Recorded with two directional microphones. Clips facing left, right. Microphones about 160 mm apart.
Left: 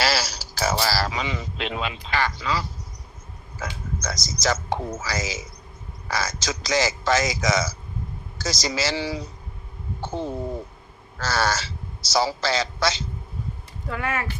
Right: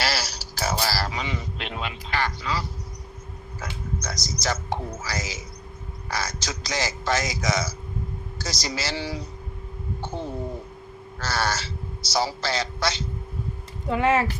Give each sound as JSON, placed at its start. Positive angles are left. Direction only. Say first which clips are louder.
{"t": 0.0, "sound": "a man's voice", "louder": "left 4 dB", "side_deg": 90}
{"t": 11.2, "sound": "speech", "louder": "left 3 dB", "side_deg": 90}
{"t": 13.8, "sound": "speech", "louder": "right 7 dB", "side_deg": -20}